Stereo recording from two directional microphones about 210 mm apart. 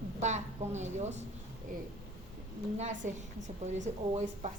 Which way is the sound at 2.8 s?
35° right (ahead or behind).